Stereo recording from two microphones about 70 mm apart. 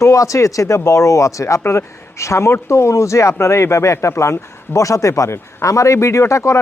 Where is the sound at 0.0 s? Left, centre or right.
Left.